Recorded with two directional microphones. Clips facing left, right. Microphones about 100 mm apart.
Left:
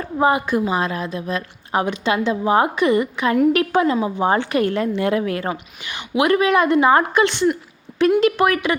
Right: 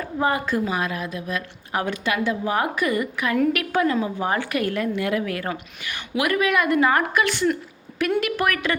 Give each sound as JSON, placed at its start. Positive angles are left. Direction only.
{"t": 0.2, "sound": "a woman's voice", "side_deg": 20}